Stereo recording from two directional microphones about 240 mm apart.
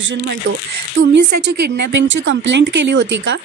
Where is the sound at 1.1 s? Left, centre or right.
Right.